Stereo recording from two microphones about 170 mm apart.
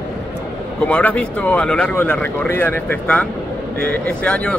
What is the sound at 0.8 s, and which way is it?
Speech, 10° left (ahead or behind).